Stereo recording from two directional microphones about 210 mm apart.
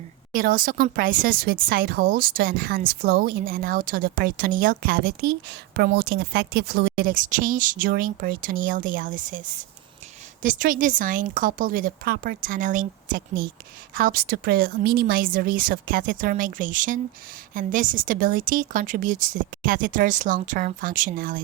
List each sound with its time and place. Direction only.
0.3 s a woman's voice: 45° right (ahead or behind)